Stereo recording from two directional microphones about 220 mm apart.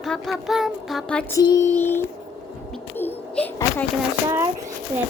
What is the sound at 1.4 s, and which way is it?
Speech, 15° left (ahead or behind).